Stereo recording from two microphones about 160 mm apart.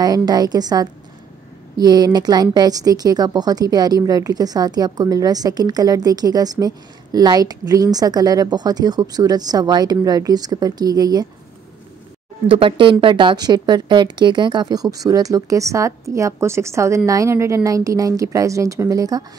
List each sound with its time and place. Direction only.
0.0 s a woman's voice: 25° right (ahead or behind)
12.4 s a woman's voice: 35° right (ahead or behind)